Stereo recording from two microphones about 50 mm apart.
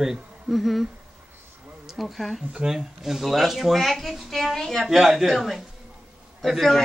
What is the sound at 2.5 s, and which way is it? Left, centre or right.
A woman's voice, centre.